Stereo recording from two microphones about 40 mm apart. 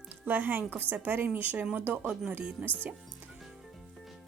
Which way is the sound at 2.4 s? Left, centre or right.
Right.